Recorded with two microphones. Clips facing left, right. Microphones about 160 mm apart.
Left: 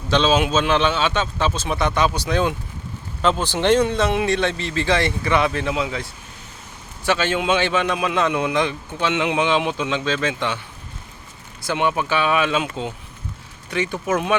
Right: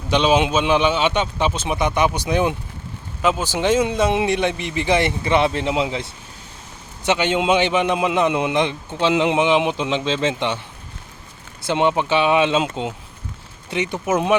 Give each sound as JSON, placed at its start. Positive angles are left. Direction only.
{"t": 0.1, "sound": "a man's voice", "side_deg": -15}
{"t": 11.6, "sound": "a man's voice", "side_deg": -25}